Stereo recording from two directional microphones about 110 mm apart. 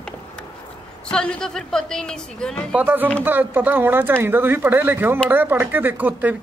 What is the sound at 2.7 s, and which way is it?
Speech, 15° right (ahead or behind).